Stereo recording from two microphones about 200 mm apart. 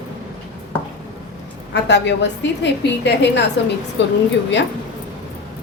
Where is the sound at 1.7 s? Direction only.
60° left (ahead or behind).